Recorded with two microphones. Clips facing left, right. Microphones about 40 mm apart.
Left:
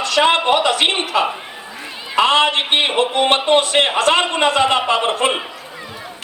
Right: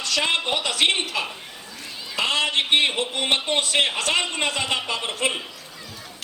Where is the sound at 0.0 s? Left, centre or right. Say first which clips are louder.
Left 9 dB; left.